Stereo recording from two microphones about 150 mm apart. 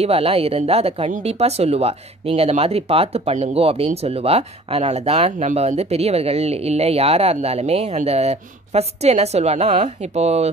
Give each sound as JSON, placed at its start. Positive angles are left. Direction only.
{"t": 0.0, "sound": "speech", "side_deg": -40}